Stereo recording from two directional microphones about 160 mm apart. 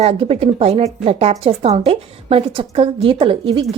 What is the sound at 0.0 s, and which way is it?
A woman's voice, 40° right (ahead or behind).